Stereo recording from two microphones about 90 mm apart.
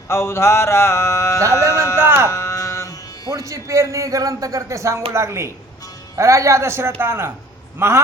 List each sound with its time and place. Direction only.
0.1 s speech: 30° left (ahead or behind)
2.0 s speech: 25° right (ahead or behind)
2.3 s a sound: 30° left (ahead or behind)
3.2 s speech: 40° right (ahead or behind)